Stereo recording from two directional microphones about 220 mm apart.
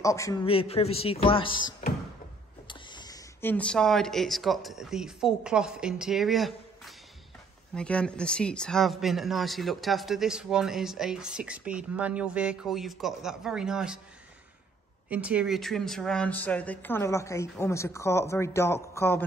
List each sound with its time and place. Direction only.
0.0 s speech: 15° left (ahead or behind); by 13.9 s 5° right (ahead or behind)
15.0 s speech: 5° right (ahead or behind); by 19.2 s 10° left (ahead or behind)